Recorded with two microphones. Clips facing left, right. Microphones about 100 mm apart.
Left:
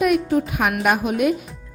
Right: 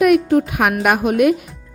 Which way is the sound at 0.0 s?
60° right (ahead or behind).